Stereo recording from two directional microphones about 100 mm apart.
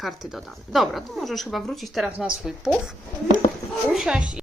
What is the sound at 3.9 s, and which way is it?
Speech, 10° right (ahead or behind).